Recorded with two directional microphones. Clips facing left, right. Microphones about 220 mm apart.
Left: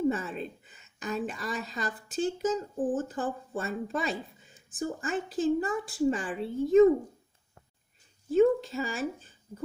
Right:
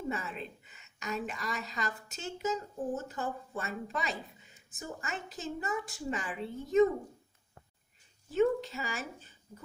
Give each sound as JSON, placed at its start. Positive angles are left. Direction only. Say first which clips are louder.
{"t": 0.1, "sound": "a woman's voice", "louder": "left 6 dB", "side_deg": 35}
{"t": 8.4, "sound": "speech", "louder": "left 5 dB", "side_deg": 35}